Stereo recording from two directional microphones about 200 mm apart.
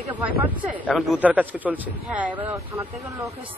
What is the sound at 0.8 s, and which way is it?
A man's voice, 5° left (ahead or behind).